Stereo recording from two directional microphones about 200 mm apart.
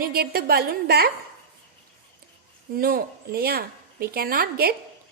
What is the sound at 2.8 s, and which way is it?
A woman's voice, 45° right (ahead or behind).